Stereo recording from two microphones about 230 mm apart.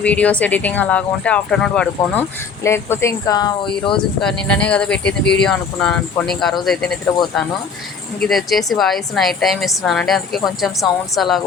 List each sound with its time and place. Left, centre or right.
0.0 s a woman's voice: centre
4.2 s a woman's voice: centre
8.2 s a woman's voice: centre